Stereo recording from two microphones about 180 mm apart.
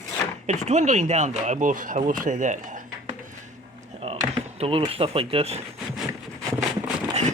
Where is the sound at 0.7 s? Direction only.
40° right (ahead or behind).